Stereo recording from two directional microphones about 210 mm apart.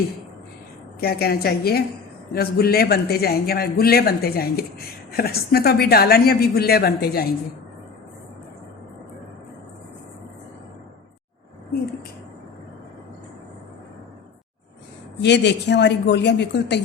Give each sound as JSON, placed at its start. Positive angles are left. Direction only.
{"t": 1.0, "sound": "a man's voice", "side_deg": 45}
{"t": 15.2, "sound": "a man's voice", "side_deg": 55}